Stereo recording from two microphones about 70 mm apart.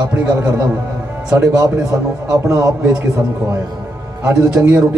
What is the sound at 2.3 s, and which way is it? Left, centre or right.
Speech, right.